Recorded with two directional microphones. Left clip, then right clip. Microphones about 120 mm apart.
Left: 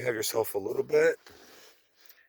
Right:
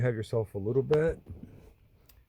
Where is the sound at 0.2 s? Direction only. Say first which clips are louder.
Left 3 dB; 45° left (ahead or behind).